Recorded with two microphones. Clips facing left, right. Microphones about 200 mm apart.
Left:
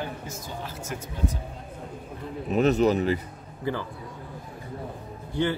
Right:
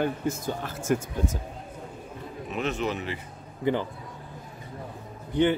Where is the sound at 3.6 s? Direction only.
20° right (ahead or behind).